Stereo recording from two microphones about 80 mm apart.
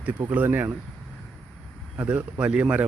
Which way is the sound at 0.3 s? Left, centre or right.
Right.